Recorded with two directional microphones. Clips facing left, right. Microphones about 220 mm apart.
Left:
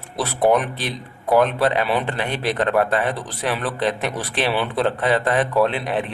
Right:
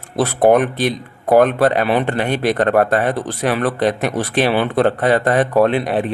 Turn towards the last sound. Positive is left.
turn(degrees=-40)  # may be behind; listen again after turning